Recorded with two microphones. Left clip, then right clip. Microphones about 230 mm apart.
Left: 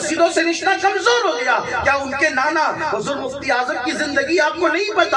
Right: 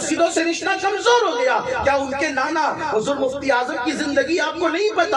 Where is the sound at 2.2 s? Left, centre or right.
Right.